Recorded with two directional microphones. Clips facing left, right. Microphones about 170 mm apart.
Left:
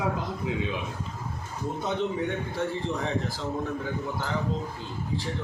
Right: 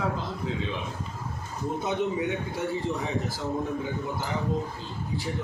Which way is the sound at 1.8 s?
10° right (ahead or behind).